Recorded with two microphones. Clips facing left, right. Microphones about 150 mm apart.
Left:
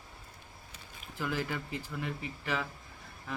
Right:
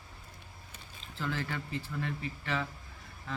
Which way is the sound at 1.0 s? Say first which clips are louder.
Left 1 dB; 10° left (ahead or behind).